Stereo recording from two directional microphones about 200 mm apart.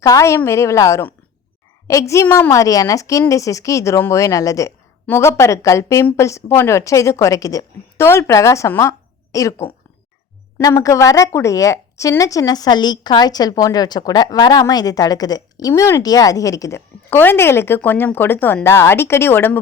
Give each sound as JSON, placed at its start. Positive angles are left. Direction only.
{"t": 0.0, "sound": "speech", "side_deg": 15}